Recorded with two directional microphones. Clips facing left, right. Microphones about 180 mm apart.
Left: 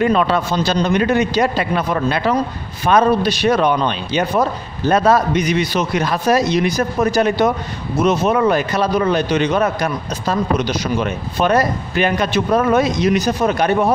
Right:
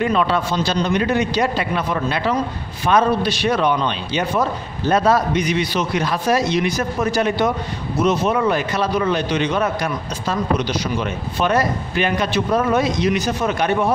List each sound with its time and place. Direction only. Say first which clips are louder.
0.0 s a man's voice: left 3 dB; 45° left (ahead or behind)